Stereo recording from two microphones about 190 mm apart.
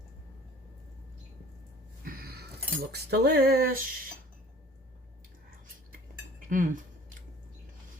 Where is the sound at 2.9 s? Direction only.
60° right (ahead or behind).